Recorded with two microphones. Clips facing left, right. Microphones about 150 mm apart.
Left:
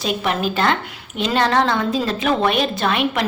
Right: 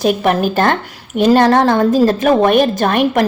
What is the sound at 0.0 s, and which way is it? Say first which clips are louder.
A woman's voice: right 7 dB; 50° right (ahead or behind).